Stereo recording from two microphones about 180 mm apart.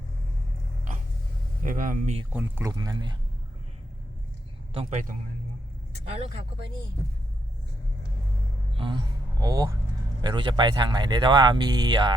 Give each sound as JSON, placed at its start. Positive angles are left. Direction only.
{"t": 1.6, "sound": "speech", "side_deg": -50}
{"t": 2.3, "sound": "speech", "side_deg": -10}
{"t": 4.7, "sound": "a man's voice", "side_deg": -35}
{"t": 8.7, "sound": "speech", "side_deg": -30}